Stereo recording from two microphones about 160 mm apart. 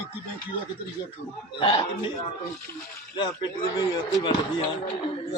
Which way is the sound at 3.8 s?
30° left (ahead or behind).